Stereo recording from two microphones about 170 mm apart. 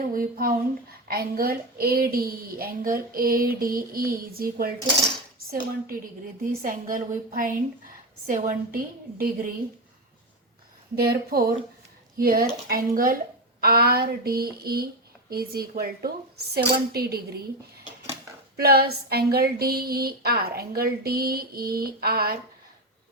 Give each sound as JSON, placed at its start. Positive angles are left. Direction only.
{"t": 0.1, "sound": "speech", "side_deg": -55}
{"t": 8.3, "sound": "speech", "side_deg": -55}
{"t": 10.9, "sound": "speech", "side_deg": -65}
{"t": 18.5, "sound": "speech", "side_deg": -65}